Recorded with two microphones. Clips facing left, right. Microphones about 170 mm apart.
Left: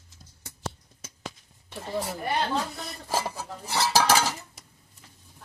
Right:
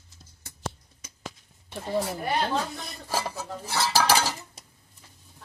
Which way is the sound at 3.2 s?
Centre (ahead or behind).